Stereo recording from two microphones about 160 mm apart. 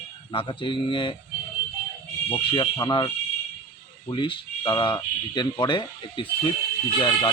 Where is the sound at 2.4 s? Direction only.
30° left (ahead or behind).